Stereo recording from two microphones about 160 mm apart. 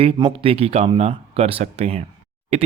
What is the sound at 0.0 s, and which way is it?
Speech, 35° right (ahead or behind).